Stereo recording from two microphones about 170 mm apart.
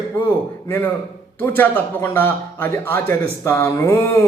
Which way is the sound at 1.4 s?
10° left (ahead or behind).